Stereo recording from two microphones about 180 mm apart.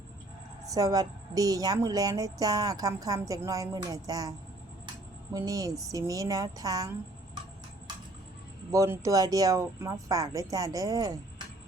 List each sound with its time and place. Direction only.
0.7 s a woman's voice: 20° right (ahead or behind)
8.7 s a woman's voice: 15° right (ahead or behind)